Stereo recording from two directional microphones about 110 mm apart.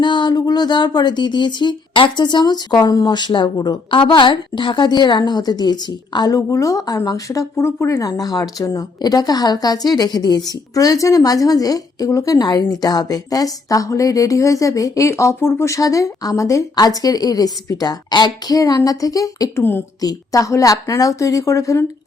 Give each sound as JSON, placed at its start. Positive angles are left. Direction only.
{"t": 0.0, "sound": "a woman's voice", "side_deg": 45}